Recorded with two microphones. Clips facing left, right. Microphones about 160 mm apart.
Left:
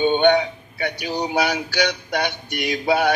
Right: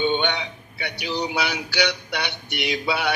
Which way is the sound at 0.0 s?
45° left (ahead or behind).